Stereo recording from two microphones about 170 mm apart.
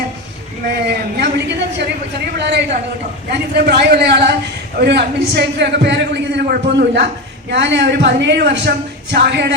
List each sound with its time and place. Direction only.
0.9 s a sound: 85° right
2.4 s speech: 80° right
3.3 s a man's voice: 70° right (ahead or behind)